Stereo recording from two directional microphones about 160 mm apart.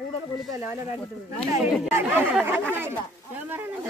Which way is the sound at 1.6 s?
15° right (ahead or behind).